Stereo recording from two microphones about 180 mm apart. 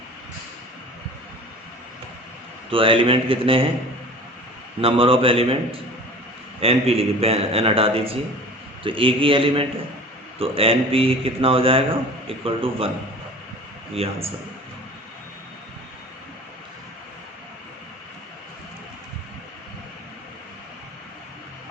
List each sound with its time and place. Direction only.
2.6 s speech: 30° right (ahead or behind)
4.8 s a man's voice: 30° right (ahead or behind)
13.9 s a man's voice: 35° right (ahead or behind)